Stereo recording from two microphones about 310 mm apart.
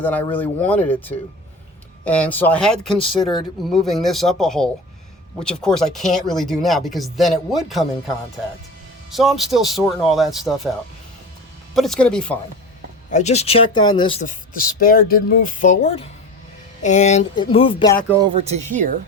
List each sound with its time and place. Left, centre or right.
0.0 s speech: centre
9.1 s speech: centre
11.7 s speech: centre
13.1 s speech: left
18.1 s speech: centre